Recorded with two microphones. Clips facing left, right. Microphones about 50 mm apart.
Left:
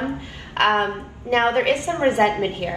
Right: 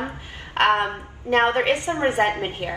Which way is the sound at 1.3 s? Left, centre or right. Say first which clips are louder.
Left 1 dB; right.